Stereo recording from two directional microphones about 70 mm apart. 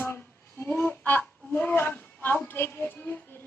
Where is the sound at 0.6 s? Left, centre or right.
Left.